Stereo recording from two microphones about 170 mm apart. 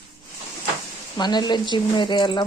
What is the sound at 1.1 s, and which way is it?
Speech, 25° left (ahead or behind).